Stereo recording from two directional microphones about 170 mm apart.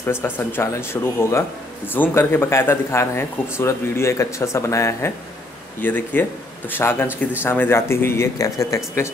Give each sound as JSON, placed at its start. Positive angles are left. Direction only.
{"t": 0.0, "sound": "speech", "side_deg": 15}